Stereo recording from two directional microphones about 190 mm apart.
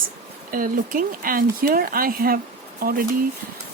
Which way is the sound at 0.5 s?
45° right (ahead or behind).